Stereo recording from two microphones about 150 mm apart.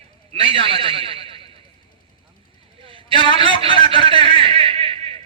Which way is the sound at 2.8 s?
35° right (ahead or behind).